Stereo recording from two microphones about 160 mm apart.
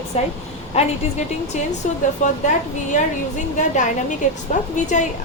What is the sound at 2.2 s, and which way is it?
A woman's voice, 50° left (ahead or behind).